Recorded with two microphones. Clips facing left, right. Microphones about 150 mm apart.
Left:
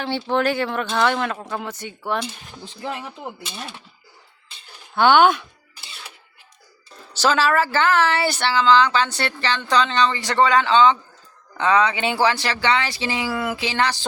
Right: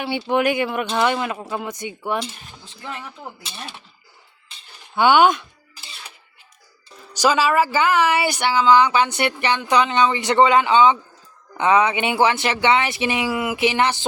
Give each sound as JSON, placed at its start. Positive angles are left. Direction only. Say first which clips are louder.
{"t": 0.0, "sound": "speech", "louder": "right 1 dB", "side_deg": -10}
{"t": 2.9, "sound": "speech", "louder": "left 3 dB", "side_deg": 10}
{"t": 4.9, "sound": "speech", "louder": "even", "side_deg": -10}
{"t": 7.2, "sound": "speech", "louder": "right 1 dB", "side_deg": -10}